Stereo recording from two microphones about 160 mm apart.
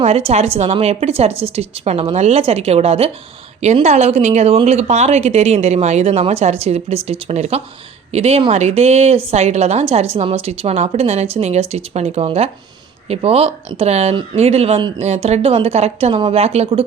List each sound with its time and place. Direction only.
0.0 s speech: 40° right (ahead or behind)